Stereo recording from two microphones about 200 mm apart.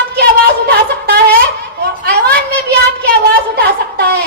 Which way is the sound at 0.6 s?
50° right (ahead or behind).